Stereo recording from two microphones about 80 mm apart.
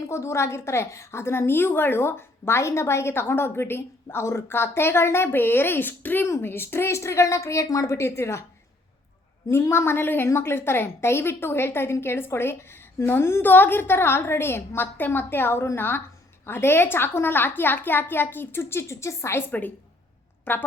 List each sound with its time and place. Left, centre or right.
0.1 s a woman's voice: left
9.5 s a woman's voice: left
19.5 s a woman's voice: left